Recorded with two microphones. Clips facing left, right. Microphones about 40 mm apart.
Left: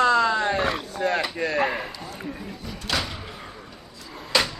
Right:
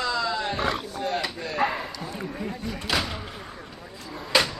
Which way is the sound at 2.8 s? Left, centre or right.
Centre.